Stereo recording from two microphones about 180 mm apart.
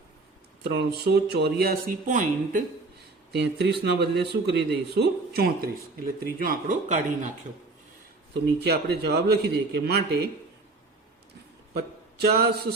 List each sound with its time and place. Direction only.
0.7 s speech: 65° right (ahead or behind); by 2.6 s 45° right (ahead or behind)
3.3 s speech: 70° right (ahead or behind); by 7.3 s 45° right (ahead or behind)
8.3 s speech: 65° right (ahead or behind)
11.7 s speech: 60° right (ahead or behind)